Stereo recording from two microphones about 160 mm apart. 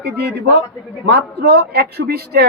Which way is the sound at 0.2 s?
90° right.